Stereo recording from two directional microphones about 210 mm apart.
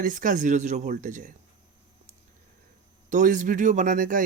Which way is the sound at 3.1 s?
35° right (ahead or behind).